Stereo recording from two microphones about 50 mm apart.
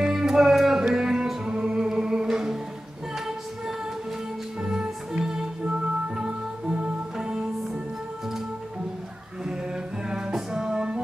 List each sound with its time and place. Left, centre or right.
0.0 s music: centre
4.6 s music: centre
10.0 s music: centre